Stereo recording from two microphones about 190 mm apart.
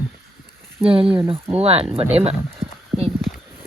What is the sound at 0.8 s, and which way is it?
Speech, 30° right (ahead or behind).